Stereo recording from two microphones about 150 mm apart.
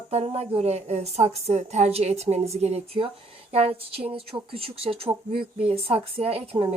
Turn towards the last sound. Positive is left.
turn(degrees=-40)  # may be behind; listen again after turning